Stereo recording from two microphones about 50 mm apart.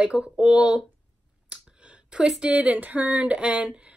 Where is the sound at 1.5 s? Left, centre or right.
Right.